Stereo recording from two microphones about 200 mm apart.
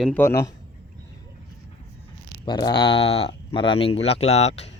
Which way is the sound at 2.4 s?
20° left (ahead or behind).